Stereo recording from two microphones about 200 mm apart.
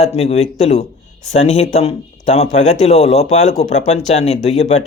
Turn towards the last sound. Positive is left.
turn(degrees=30)  # may be behind; listen again after turning